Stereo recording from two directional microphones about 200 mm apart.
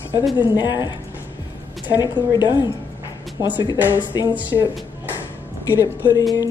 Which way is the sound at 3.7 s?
10° right (ahead or behind).